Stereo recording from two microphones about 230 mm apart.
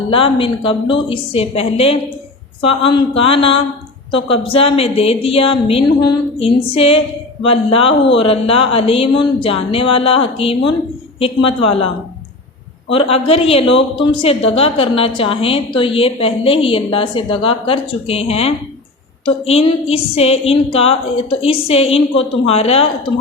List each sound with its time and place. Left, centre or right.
0.1 s a woman's voice: left
12.9 s a woman's voice: left